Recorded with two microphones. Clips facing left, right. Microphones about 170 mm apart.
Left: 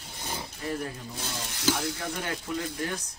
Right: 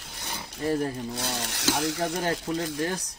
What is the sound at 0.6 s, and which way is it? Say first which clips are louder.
Speech: right 8 dB; 40° right (ahead or behind).